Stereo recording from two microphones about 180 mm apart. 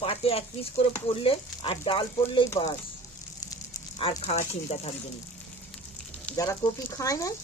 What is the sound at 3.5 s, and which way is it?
Speech, 30° left (ahead or behind).